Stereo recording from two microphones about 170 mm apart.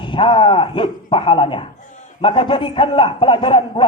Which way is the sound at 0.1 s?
30° left (ahead or behind).